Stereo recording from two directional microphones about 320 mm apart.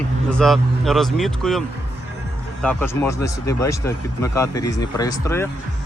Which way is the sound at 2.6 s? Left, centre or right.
Centre.